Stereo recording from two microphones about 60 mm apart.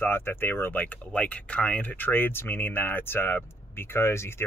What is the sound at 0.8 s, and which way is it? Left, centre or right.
Speech, left.